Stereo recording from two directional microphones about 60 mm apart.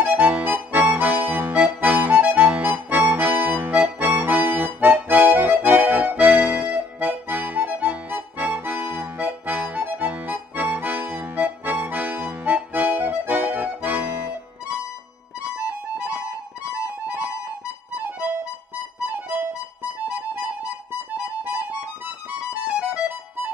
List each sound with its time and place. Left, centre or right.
0.0 s accordion: right
15.5 s music: centre